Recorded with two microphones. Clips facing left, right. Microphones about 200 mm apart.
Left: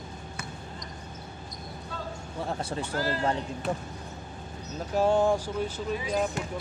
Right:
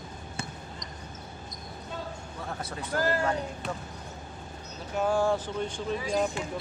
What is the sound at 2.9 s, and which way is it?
Speech, 50° right (ahead or behind).